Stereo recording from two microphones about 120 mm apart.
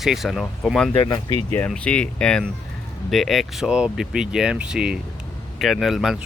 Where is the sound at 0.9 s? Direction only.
35° left (ahead or behind).